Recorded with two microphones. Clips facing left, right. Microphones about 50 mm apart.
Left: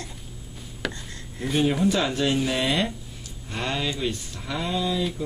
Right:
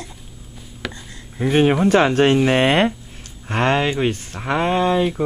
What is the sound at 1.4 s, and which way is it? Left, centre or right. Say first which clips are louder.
Speech: right 7 dB; right.